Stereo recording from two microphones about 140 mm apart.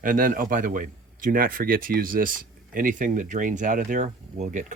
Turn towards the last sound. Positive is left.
turn(degrees=-60)  # may be behind; listen again after turning